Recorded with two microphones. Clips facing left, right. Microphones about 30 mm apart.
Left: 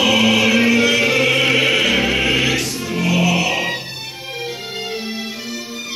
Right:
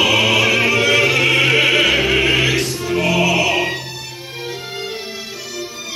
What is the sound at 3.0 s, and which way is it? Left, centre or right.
Music, right.